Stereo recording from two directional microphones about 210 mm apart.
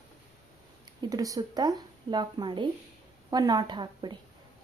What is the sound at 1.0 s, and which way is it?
A woman's voice, 15° right (ahead or behind).